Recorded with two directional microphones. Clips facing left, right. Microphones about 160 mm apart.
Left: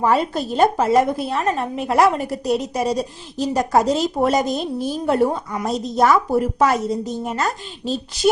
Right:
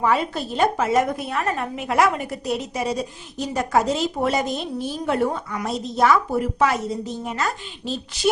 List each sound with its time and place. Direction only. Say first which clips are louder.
0.0 s speech: left 3 dB; 40° left (ahead or behind)